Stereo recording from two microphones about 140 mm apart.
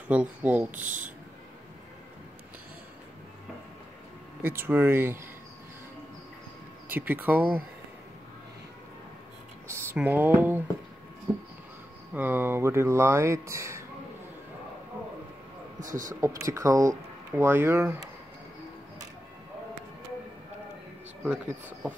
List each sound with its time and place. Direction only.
0.1 s speech: 10° right (ahead or behind)
4.4 s speech: 15° right (ahead or behind)
6.9 s speech: 15° right (ahead or behind)
9.9 s speech: 10° right (ahead or behind)
12.1 s speech: 15° right (ahead or behind)
15.8 s speech: 70° right (ahead or behind)
16.2 s speech: 20° right (ahead or behind)
21.3 s speech: 10° right (ahead or behind)